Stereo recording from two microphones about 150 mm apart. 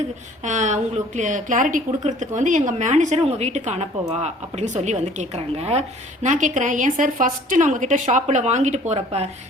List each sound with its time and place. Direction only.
0.4 s a woman's voice: 55° right (ahead or behind)
6.2 s a woman's voice: 55° right (ahead or behind)